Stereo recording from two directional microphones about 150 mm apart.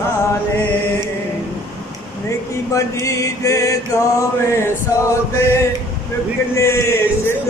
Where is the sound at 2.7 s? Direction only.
20° left (ahead or behind).